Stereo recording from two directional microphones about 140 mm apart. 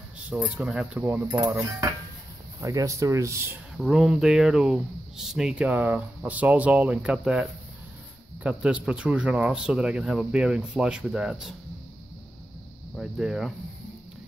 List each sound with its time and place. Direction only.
0.6 s speech: 5° right (ahead or behind)
1.3 s speech: 20° right (ahead or behind)
2.6 s speech: 20° right (ahead or behind)
3.7 s speech: centre (ahead or behind)
12.9 s speech: 5° right (ahead or behind)